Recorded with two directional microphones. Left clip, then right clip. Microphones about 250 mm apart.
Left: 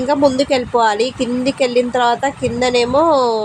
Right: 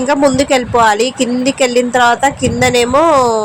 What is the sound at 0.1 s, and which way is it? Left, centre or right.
Speech, centre.